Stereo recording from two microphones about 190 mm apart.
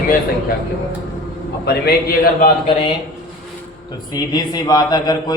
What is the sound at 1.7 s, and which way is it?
Speech, 55° left (ahead or behind).